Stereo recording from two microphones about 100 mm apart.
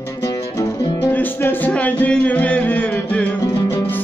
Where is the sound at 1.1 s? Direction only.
20° left (ahead or behind).